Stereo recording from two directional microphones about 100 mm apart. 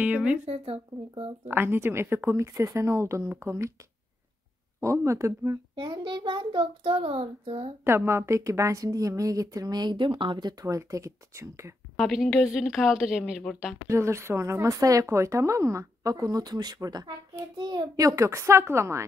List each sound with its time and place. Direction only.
0.0 s a sound: 15° right (ahead or behind)
0.5 s a child's voice: 65° right (ahead or behind)
1.5 s speech: 20° right (ahead or behind)
4.7 s speech: 30° right (ahead or behind)
5.8 s a child's voice: 50° right (ahead or behind); by 7.7 s 65° right (ahead or behind)
7.8 s speech: 25° right (ahead or behind); by 10.5 s 50° right (ahead or behind)
10.6 s speech: 35° right (ahead or behind)
12.0 s a woman's voice: centre (ahead or behind)
13.5 s a woman's voice: 5° left (ahead or behind)
13.8 s speech: 30° right (ahead or behind)